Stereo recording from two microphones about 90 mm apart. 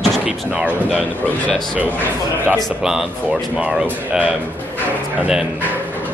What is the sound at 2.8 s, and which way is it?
Speech, 5° right (ahead or behind).